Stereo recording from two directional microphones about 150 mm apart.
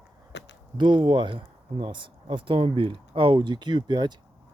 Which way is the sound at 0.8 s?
30° right (ahead or behind).